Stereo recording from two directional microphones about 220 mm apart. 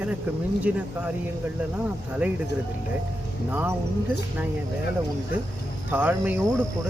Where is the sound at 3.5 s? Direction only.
10° right (ahead or behind).